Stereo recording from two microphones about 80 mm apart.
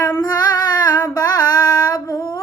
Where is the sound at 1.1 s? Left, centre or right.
Left.